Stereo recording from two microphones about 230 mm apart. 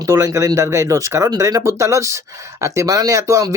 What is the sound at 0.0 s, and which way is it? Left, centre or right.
Speech, centre.